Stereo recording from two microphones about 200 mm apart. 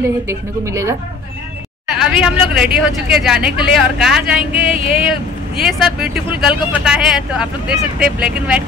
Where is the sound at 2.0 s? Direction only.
5° right (ahead or behind).